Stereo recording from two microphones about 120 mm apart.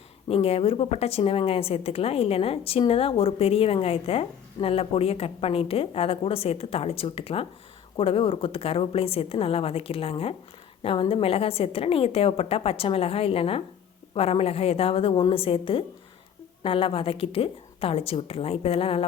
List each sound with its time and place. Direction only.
0.3 s a woman's voice: 55° left (ahead or behind)